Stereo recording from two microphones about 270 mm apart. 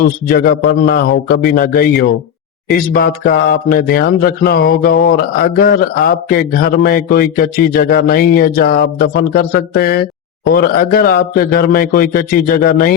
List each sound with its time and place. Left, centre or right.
0.0 s speech: left